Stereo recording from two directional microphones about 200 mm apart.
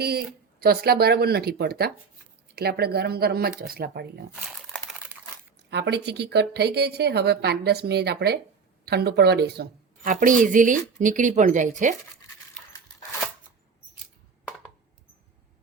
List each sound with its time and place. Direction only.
0.0 s speech: 50° right (ahead or behind)
4.7 s typing: 5° right (ahead or behind)
5.7 s a woman's voice: 60° right (ahead or behind); by 11.9 s 40° right (ahead or behind)